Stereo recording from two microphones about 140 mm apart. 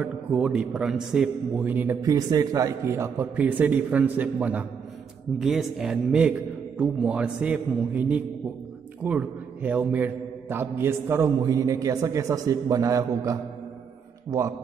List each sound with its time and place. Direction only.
0.0 s a man's voice: 10° right (ahead or behind)
2.0 s a man's voice: 25° right (ahead or behind)